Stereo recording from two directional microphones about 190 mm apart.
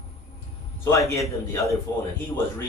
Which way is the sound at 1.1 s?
15° left (ahead or behind).